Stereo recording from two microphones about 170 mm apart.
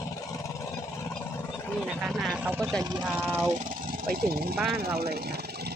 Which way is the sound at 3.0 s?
15° right (ahead or behind).